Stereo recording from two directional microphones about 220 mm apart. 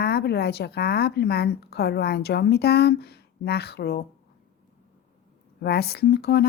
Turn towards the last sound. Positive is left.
turn(degrees=45)  # may be behind; listen again after turning